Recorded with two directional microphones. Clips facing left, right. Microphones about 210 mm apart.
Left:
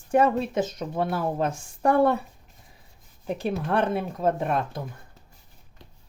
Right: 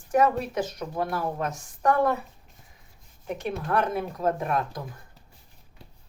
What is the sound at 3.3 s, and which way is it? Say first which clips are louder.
Speech: left 2 dB; 30° left (ahead or behind).